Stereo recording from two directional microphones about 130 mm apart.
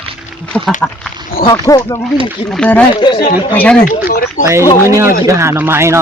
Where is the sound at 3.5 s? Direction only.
10° left (ahead or behind).